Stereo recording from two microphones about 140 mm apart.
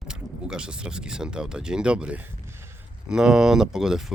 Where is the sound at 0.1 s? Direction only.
5° right (ahead or behind).